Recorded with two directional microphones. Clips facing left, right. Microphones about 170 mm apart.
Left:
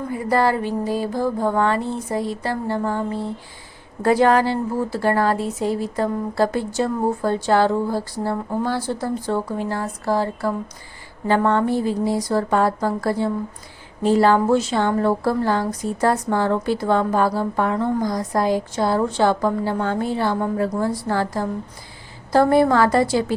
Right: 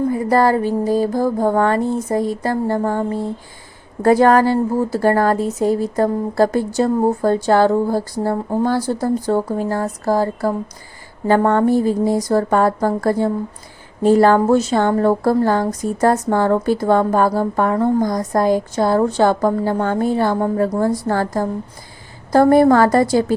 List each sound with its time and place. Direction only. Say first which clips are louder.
0.1 s a woman's voice: even; 40° right (ahead or behind)